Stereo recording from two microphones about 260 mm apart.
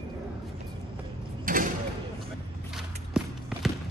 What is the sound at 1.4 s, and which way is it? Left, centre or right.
Mechanisms, right.